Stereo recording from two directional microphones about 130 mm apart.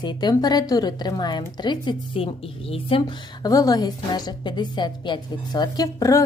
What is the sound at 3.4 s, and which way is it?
A woman's voice, 25° left (ahead or behind).